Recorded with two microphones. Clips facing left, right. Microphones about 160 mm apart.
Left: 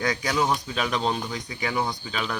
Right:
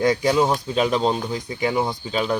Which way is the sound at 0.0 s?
25° right (ahead or behind).